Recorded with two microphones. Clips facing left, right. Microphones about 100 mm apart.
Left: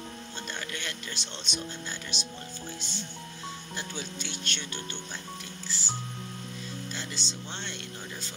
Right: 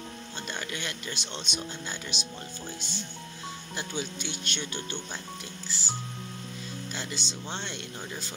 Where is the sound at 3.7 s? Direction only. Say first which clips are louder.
Right 6 dB; 10° right (ahead or behind).